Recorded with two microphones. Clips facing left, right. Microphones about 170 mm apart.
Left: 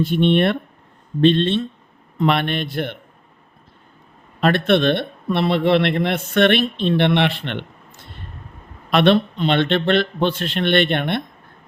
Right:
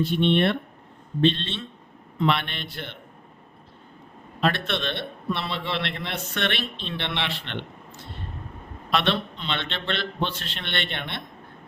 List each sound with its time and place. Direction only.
0.0 s a man's voice: 50° left (ahead or behind)
4.4 s speech: 55° left (ahead or behind)
8.9 s a man's voice: 55° left (ahead or behind)